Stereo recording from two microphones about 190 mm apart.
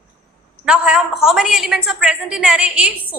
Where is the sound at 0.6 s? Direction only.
5° right (ahead or behind).